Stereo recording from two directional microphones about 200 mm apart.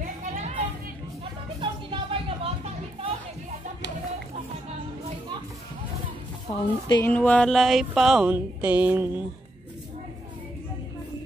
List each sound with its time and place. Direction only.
0.0 s a sound: 35° right (ahead or behind)
1.6 s music: 25° right (ahead or behind)
6.9 s speech: 10° left (ahead or behind); by 9.2 s 10° right (ahead or behind)